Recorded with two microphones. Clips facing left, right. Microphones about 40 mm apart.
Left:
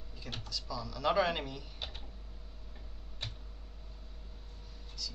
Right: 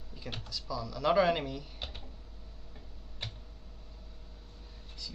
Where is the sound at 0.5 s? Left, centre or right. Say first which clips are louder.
Right 3 dB; centre.